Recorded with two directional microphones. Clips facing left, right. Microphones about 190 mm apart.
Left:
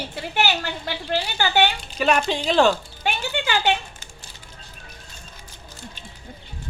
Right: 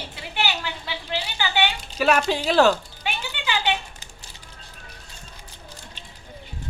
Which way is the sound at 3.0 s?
45° left (ahead or behind).